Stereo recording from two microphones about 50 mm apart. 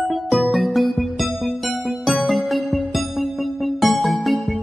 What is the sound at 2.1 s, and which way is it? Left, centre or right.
Music, centre.